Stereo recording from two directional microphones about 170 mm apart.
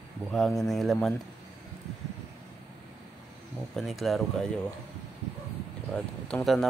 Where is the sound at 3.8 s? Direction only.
Centre (ahead or behind).